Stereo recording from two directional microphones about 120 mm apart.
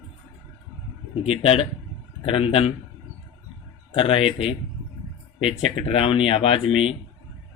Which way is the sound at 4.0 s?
50° left (ahead or behind).